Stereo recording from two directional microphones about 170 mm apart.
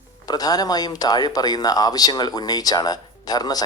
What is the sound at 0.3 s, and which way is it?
Speech, 20° left (ahead or behind).